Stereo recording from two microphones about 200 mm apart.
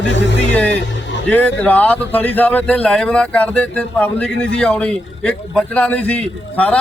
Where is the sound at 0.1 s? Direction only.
60° left (ahead or behind).